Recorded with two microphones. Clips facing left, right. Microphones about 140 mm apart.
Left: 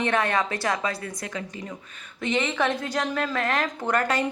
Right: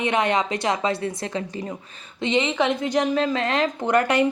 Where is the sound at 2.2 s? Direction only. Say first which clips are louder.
Right 3 dB; 20° right (ahead or behind).